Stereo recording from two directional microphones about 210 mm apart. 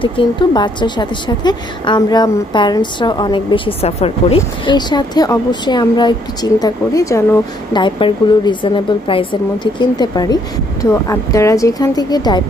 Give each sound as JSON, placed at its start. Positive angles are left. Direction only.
{"t": 0.0, "sound": "a woman's voice", "side_deg": 25}